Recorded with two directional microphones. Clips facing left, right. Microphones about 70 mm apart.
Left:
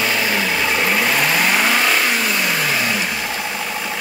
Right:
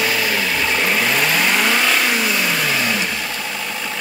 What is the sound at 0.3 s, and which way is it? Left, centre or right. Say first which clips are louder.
Vehicle: left 1 dB; centre.